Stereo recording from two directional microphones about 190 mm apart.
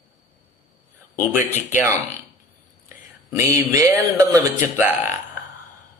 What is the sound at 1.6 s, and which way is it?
Speech, 40° left (ahead or behind).